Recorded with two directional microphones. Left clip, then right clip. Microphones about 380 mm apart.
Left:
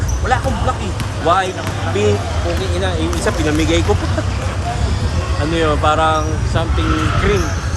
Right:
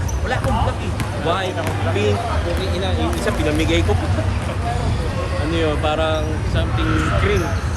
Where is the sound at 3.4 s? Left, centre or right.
Centre.